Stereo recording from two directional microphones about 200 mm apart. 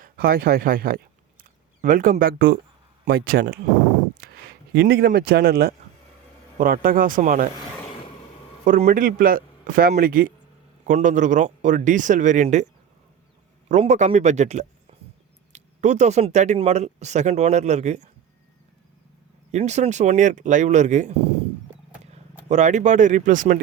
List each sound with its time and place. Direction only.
0.0 s a man's voice: 45° right (ahead or behind)
4.7 s a man's voice: 55° right (ahead or behind); by 7.4 s 40° right (ahead or behind)
8.6 s a man's voice: 40° right (ahead or behind)
13.7 s speech: 35° right (ahead or behind)
19.5 s speech: 35° right (ahead or behind)
22.4 s speech: 35° right (ahead or behind)